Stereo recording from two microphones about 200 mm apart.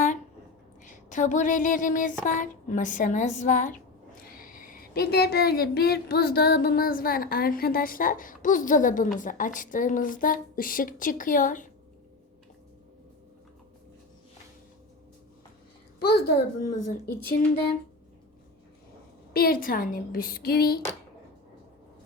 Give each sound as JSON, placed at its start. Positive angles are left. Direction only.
{"t": 0.9, "sound": "a sound", "side_deg": 40}
{"t": 4.3, "sound": "speech", "side_deg": 45}
{"t": 16.0, "sound": "speech", "side_deg": 50}
{"t": 19.3, "sound": "speech", "side_deg": 50}